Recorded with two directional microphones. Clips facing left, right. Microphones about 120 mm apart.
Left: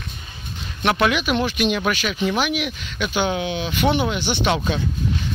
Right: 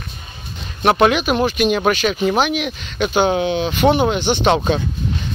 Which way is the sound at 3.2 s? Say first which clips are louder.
Right 6 dB; 40° right (ahead or behind).